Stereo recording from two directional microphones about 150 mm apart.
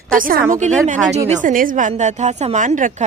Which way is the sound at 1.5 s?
65° right (ahead or behind).